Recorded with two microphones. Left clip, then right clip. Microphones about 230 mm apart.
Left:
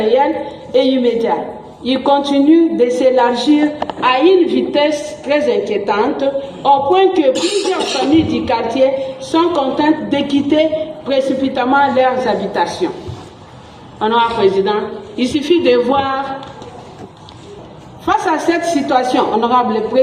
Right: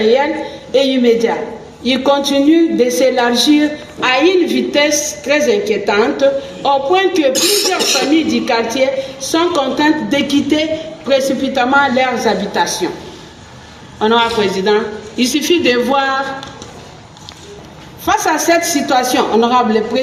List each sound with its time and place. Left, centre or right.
0.0 s speech: right
14.0 s speech: right
18.0 s speech: right